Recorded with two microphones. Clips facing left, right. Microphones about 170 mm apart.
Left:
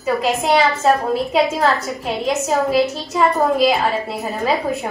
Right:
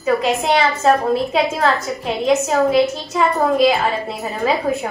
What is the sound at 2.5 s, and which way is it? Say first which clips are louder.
A woman's voice: right 2 dB; centre (ahead or behind).